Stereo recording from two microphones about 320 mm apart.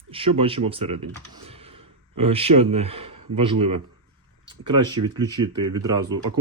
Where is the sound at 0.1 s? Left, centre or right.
Centre.